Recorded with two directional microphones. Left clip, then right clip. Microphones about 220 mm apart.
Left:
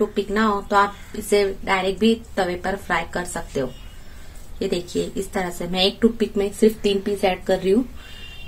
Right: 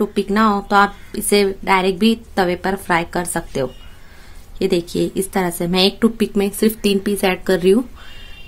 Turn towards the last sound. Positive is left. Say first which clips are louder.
# right 4 dB
turn(degrees=-50)  # may be behind; listen again after turning